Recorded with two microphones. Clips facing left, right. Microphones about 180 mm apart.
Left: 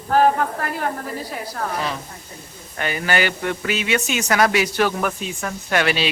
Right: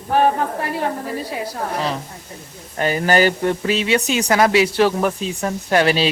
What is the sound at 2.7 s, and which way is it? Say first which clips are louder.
Speech: right 5 dB; 35° right (ahead or behind).